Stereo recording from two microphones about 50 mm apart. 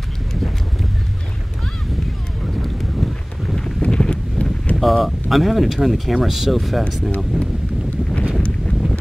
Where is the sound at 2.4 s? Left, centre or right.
Centre.